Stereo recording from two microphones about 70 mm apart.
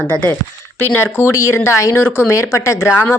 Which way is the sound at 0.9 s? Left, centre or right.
Left.